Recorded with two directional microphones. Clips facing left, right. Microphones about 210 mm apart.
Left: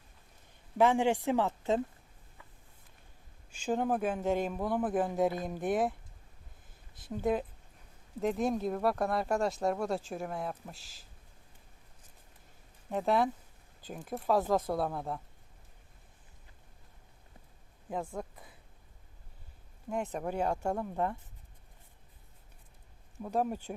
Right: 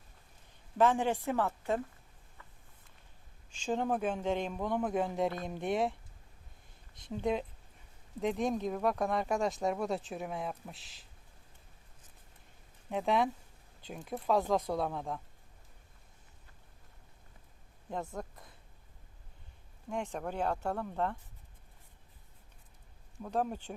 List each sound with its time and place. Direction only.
0.8 s speech: 15° left (ahead or behind)
3.5 s speech: 5° left (ahead or behind)
6.9 s speech: 5° left (ahead or behind)
12.9 s speech: 5° left (ahead or behind)
18.1 s a sound: 5° left (ahead or behind)
19.9 s speech: 5° left (ahead or behind)
23.2 s speech: 10° left (ahead or behind)